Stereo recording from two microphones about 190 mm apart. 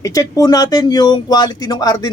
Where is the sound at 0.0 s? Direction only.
15° left (ahead or behind).